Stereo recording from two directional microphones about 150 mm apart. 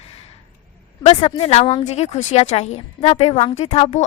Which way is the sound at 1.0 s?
45° left (ahead or behind).